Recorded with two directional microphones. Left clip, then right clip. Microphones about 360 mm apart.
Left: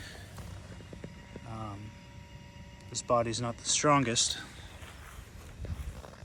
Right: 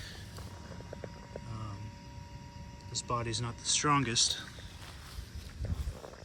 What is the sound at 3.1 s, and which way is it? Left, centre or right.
Speech, centre.